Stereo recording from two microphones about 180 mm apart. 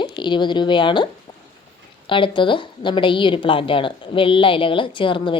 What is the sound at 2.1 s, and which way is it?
A woman's voice, 30° left (ahead or behind).